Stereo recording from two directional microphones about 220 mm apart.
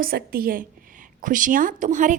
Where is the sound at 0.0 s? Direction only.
45° right (ahead or behind).